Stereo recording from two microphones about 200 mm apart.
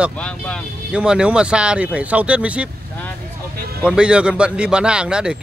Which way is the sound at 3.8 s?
5° right (ahead or behind).